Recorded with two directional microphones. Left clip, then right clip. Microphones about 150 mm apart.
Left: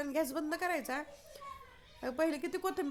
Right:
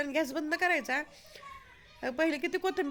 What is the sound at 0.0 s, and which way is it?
A woman's voice, 15° right (ahead or behind).